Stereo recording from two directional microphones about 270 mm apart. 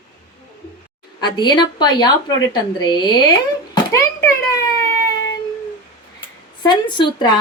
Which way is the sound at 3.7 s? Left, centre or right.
Centre.